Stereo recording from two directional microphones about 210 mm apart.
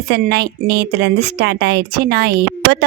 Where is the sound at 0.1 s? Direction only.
50° right (ahead or behind).